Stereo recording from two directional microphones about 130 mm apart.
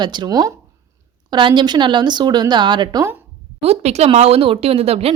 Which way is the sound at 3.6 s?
55° right (ahead or behind).